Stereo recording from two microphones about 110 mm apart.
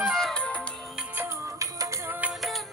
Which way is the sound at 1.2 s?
25° right (ahead or behind).